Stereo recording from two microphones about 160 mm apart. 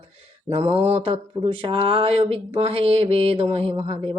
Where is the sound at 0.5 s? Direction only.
40° right (ahead or behind).